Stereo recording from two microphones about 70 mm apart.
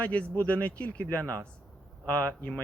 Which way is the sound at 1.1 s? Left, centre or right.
Right.